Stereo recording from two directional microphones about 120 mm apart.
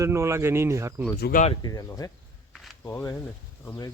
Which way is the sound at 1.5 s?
35° left (ahead or behind).